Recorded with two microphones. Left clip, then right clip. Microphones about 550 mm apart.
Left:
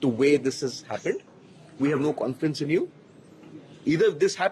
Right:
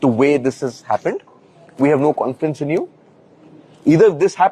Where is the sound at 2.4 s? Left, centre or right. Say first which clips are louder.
Right 6 dB; centre.